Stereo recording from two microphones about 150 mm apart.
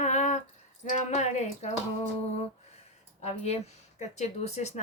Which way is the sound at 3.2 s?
45° left (ahead or behind).